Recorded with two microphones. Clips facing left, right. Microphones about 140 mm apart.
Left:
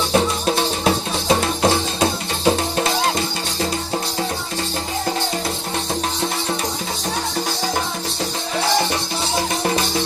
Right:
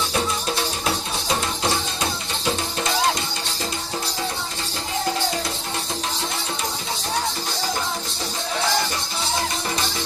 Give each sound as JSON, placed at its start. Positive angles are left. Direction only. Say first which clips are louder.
{"t": 0.1, "sound": "music", "louder": "left 6 dB", "side_deg": 45}